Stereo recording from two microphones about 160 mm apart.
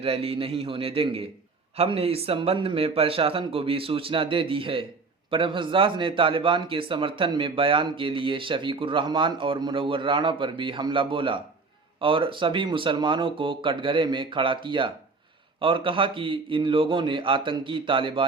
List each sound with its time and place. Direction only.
0.0 s a man's voice: 35° right (ahead or behind)